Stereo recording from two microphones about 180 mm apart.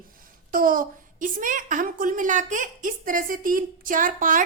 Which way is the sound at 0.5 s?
50° right (ahead or behind).